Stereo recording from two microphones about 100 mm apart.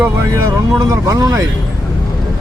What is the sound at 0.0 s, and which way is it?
Speech, 25° right (ahead or behind).